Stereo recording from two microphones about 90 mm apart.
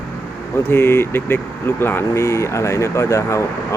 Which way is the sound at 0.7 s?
25° left (ahead or behind).